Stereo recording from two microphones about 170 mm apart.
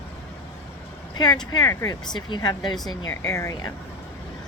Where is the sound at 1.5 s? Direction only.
20° left (ahead or behind).